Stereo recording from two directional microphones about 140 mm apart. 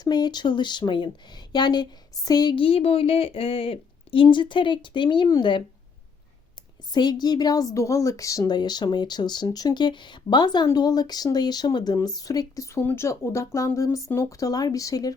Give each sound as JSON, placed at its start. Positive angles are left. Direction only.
{"t": 0.0, "sound": "speech", "side_deg": 30}
{"t": 6.9, "sound": "speech", "side_deg": 30}